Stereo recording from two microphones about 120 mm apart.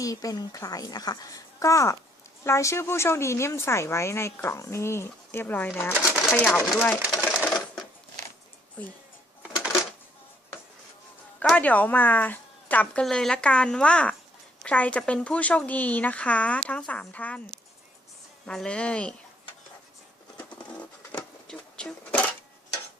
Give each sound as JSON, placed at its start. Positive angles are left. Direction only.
{"t": 0.0, "sound": "a woman's voice", "side_deg": 30}
{"t": 7.0, "sound": "sewing machine", "side_deg": -5}
{"t": 11.3, "sound": "speech", "side_deg": 10}
{"t": 18.4, "sound": "speech", "side_deg": 5}
{"t": 20.7, "sound": "a sound", "side_deg": 10}